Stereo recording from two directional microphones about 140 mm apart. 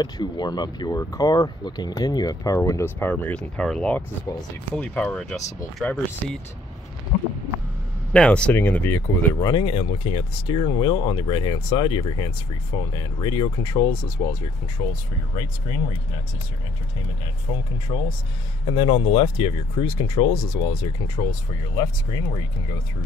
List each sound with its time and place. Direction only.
0.0 s speech: 30° left (ahead or behind); by 6.4 s 5° left (ahead or behind)
8.1 s speech: 10° left (ahead or behind)
9.4 s speech: 35° left (ahead or behind)
14.8 s speech: 40° left (ahead or behind)
17.5 s speech: 40° left (ahead or behind)